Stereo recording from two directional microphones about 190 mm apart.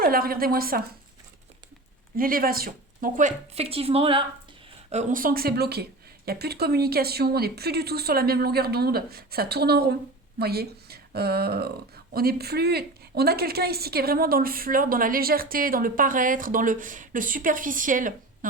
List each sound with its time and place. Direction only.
0.0 s a woman's voice: 50° right (ahead or behind)
2.1 s a woman's voice: 50° right (ahead or behind)